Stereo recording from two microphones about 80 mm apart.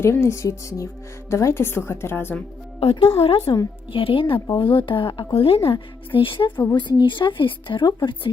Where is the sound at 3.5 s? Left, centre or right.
Left.